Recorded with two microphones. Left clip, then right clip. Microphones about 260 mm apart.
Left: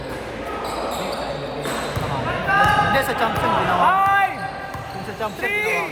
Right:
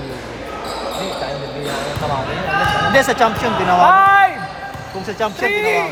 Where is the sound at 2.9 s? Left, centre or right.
Right.